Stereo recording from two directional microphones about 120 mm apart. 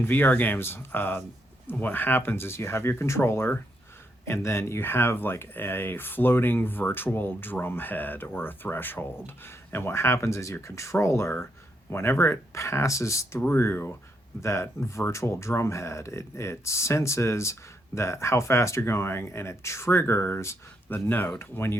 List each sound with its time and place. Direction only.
0.0 s speech: 15° left (ahead or behind)